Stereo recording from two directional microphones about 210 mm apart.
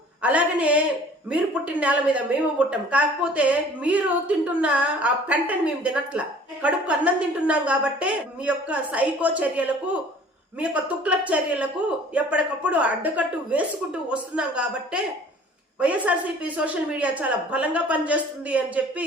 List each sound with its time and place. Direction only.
0.2 s a woman's voice: 5° right (ahead or behind)